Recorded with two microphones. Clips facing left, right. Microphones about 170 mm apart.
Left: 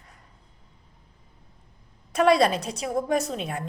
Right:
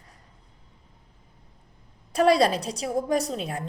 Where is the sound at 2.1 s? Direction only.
30° right (ahead or behind).